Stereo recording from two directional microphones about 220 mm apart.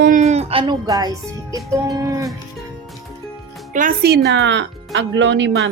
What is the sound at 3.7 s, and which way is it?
Speech, 40° right (ahead or behind).